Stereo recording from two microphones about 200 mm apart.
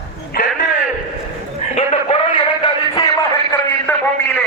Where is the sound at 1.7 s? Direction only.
30° left (ahead or behind).